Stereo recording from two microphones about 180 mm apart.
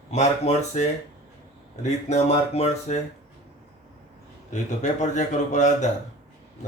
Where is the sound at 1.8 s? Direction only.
35° left (ahead or behind).